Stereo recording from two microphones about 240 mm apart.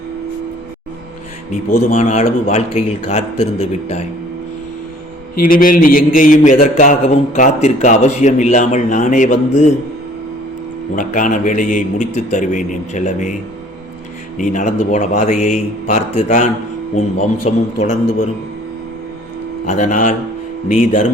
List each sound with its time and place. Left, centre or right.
1.9 s a man's voice: left
5.5 s a man's voice: left
10.9 s a man's voice: left
14.3 s a man's voice: left
19.6 s a man's voice: left